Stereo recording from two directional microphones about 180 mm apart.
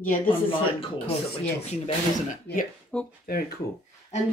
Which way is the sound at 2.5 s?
65° left (ahead or behind).